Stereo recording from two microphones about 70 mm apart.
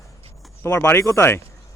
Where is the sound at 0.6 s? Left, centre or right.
Left.